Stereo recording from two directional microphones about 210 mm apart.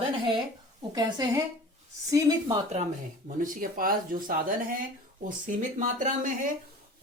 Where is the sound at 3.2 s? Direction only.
40° right (ahead or behind).